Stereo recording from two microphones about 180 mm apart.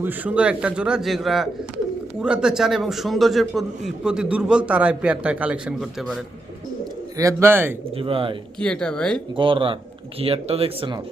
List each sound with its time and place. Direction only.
0.0 s a man's voice: 10° right (ahead or behind)
7.2 s speech: 15° right (ahead or behind)
7.9 s speech: 30° right (ahead or behind)
8.6 s a man's voice: 5° left (ahead or behind)
9.3 s speech: 30° right (ahead or behind)